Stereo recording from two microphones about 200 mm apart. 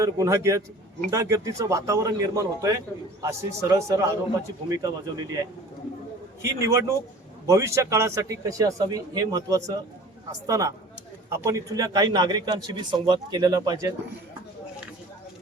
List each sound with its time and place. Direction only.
0.0 s a man's voice: 15° right (ahead or behind)